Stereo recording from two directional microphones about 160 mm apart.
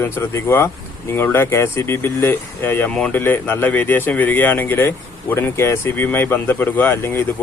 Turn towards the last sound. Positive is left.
turn(degrees=15)  # may be behind; listen again after turning